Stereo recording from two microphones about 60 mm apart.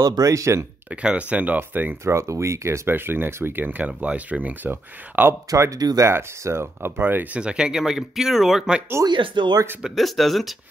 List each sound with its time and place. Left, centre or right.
0.0 s speech: right
1.0 s speech: right
2.0 s speech: right
2.9 s speech: right
5.6 s speech: right
6.0 s speech: right
7.0 s speech: right
7.3 s speech: centre
9.0 s speech: right
9.8 s speech: centre